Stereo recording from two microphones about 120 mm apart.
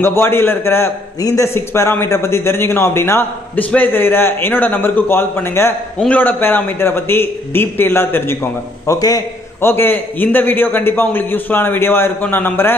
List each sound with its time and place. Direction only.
0.0 s a man's voice: 20° left (ahead or behind)